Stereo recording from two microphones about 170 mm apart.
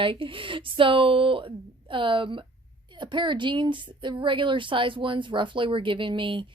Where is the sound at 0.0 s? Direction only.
30° right (ahead or behind).